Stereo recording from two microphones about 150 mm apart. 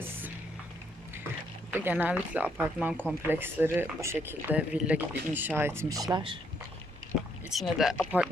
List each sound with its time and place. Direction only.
1.7 s speech: 15° right (ahead or behind)
6.1 s speech: 30° right (ahead or behind)
7.5 s speech: centre (ahead or behind)